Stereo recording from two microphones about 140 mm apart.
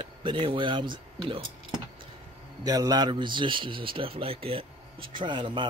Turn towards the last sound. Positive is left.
turn(degrees=-35)  # may be behind; listen again after turning